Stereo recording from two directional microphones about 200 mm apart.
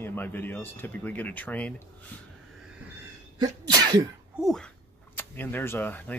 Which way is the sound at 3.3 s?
20° right (ahead or behind).